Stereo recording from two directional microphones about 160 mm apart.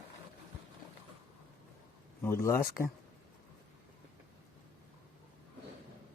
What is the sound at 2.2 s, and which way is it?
Speech, 15° left (ahead or behind).